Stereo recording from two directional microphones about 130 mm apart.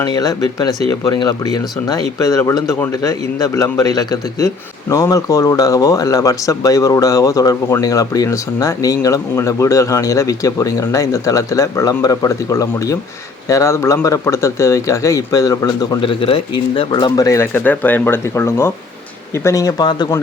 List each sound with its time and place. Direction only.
0.0 s a man's voice: 30° left (ahead or behind)
16.0 s a man's voice: 45° left (ahead or behind)